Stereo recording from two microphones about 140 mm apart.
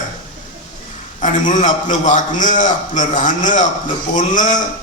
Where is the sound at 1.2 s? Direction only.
65° left (ahead or behind).